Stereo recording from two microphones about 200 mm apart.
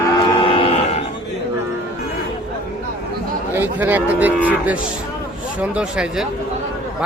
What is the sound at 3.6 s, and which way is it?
Speech, 10° right (ahead or behind).